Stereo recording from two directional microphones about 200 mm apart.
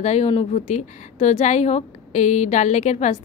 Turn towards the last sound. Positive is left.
turn(degrees=35)  # may be behind; listen again after turning